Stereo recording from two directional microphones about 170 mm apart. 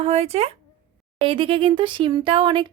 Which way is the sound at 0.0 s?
35° right (ahead or behind).